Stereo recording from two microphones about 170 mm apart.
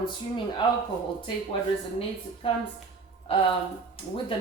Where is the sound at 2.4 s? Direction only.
30° left (ahead or behind).